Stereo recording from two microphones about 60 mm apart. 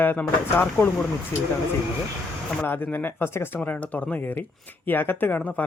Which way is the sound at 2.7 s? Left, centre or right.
Left.